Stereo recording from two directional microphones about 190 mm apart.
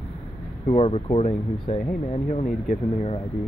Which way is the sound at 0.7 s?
30° left (ahead or behind).